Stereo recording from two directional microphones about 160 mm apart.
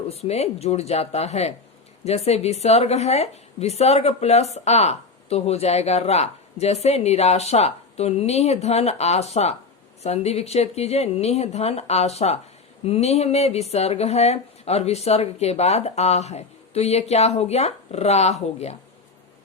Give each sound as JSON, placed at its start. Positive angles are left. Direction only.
{"t": 0.1, "sound": "a woman's voice", "side_deg": 40}